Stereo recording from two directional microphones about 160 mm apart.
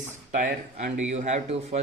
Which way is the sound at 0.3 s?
55° right (ahead or behind).